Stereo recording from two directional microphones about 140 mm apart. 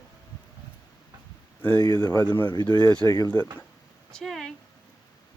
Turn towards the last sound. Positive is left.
turn(degrees=0)  # may be behind; listen again after turning